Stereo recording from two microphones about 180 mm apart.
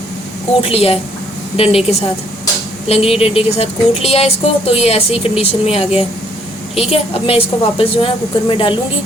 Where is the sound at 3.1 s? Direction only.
30° left (ahead or behind).